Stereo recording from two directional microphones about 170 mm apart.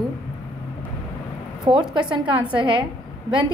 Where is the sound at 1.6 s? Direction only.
25° right (ahead or behind).